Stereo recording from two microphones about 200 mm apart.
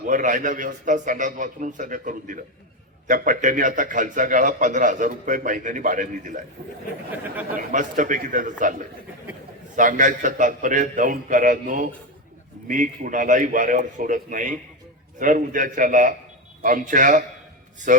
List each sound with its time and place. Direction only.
0.1 s a man's voice: 40° right (ahead or behind)
7.7 s a man's voice: 40° right (ahead or behind)
9.7 s a man's voice: 40° right (ahead or behind)